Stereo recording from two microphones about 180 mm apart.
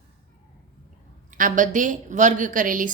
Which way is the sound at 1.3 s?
45° right (ahead or behind).